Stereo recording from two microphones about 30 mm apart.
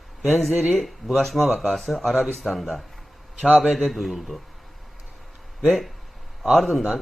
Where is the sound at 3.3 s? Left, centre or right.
Right.